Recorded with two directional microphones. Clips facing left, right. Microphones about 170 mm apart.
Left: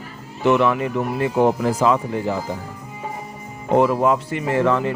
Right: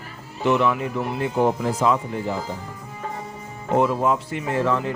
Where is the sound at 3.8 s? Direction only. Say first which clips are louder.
Left 3 dB; 70° left (ahead or behind).